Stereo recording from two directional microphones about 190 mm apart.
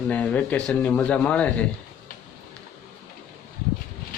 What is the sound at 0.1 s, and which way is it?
Speech, 5° left (ahead or behind).